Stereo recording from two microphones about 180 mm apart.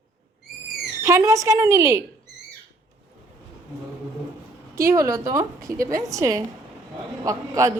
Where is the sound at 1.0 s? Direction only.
15° right (ahead or behind).